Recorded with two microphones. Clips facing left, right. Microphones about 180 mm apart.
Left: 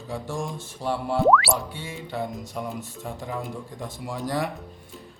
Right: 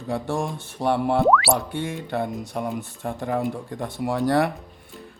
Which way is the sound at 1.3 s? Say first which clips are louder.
Left 2 dB; centre (ahead or behind).